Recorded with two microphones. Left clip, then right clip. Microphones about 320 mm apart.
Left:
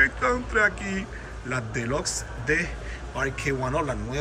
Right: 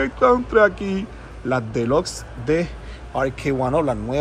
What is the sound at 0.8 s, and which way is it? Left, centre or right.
Speech, centre.